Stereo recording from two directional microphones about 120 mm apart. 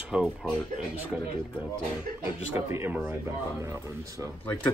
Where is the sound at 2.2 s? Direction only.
20° right (ahead or behind).